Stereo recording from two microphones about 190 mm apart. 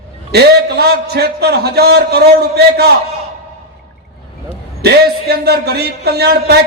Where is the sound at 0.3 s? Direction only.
60° right (ahead or behind).